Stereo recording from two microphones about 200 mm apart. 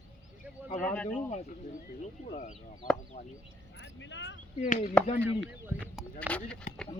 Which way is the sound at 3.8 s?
65° left (ahead or behind).